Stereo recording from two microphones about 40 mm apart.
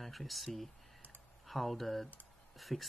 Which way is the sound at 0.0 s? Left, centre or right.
Centre.